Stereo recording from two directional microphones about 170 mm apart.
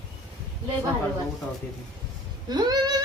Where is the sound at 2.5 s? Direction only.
25° right (ahead or behind).